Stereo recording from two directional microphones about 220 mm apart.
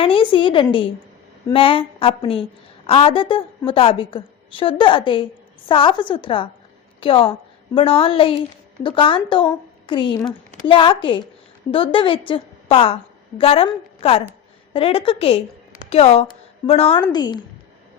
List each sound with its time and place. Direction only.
0.0 s a woman's voice: 25° left (ahead or behind)